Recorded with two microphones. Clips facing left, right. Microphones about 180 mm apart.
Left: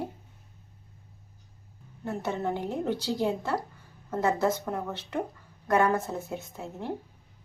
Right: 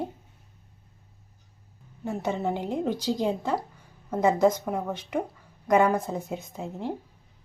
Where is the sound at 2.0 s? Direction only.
15° right (ahead or behind).